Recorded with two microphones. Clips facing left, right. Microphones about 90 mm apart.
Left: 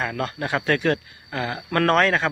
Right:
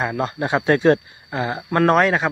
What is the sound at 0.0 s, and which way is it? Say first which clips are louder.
Speech: right 4 dB; 20° right (ahead or behind).